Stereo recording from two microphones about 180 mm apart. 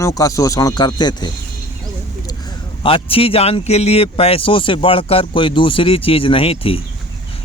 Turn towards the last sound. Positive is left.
turn(degrees=30)  # may be behind; listen again after turning